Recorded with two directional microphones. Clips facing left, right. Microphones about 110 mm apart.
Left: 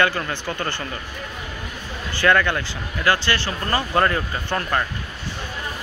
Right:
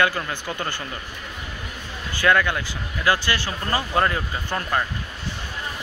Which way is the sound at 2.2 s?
10° right (ahead or behind).